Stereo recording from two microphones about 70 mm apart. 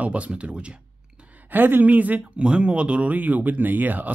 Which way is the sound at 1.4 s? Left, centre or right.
Right.